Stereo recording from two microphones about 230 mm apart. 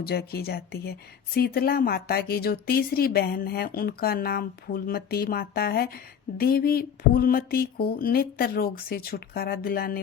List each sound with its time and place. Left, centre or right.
0.0 s speech: left